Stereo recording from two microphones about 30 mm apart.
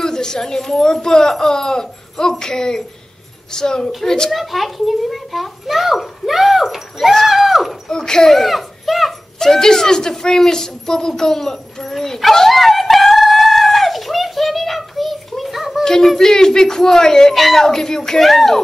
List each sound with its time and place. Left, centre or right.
0.0 s a woman's voice: left
4.3 s a child's voice: centre
7.2 s a sound: centre
7.9 s speech: left
8.4 s a sound: centre
9.4 s a woman's voice: centre
12.4 s a sound: centre
15.8 s a sound: centre
16.2 s a woman's voice: centre
17.3 s a child's voice: centre
17.6 s a woman's voice: centre
18.2 s a child's voice: centre